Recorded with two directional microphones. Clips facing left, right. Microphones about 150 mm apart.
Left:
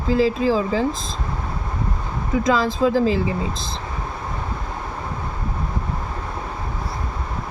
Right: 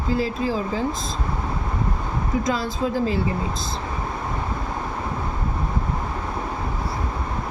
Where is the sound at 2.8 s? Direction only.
90° left.